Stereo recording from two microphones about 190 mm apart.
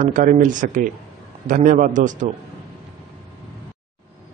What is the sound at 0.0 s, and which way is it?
A man's voice, 40° right (ahead or behind).